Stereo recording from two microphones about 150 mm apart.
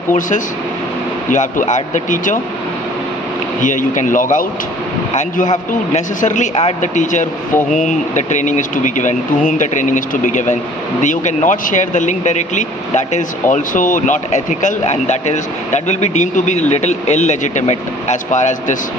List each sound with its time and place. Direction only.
0.1 s speech: 55° left (ahead or behind)
3.6 s speech: 55° left (ahead or behind)
5.9 s speech: 55° left (ahead or behind)